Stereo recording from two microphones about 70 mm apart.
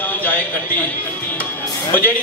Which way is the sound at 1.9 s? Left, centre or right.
Left.